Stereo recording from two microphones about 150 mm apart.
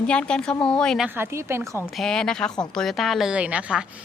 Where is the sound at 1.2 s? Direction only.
15° right (ahead or behind).